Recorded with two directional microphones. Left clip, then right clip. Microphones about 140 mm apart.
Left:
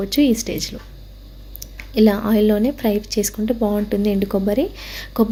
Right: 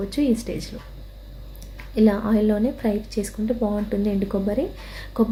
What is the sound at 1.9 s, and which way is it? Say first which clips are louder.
A woman's voice: left 4 dB; 25° left (ahead or behind).